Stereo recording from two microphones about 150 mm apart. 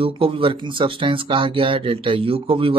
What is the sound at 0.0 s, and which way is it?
Speech, 35° right (ahead or behind).